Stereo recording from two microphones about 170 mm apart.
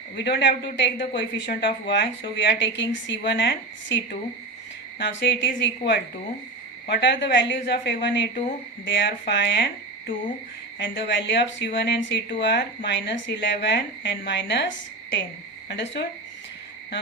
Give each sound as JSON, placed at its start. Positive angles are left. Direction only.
{"t": 0.2, "sound": "speech", "side_deg": 90}
{"t": 10.8, "sound": "speech", "side_deg": 90}
{"t": 15.7, "sound": "speech", "side_deg": 90}